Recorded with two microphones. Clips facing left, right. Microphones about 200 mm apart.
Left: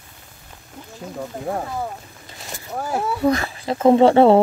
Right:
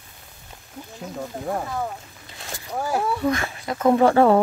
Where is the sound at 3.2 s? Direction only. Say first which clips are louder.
Left 4 dB; 35° left (ahead or behind).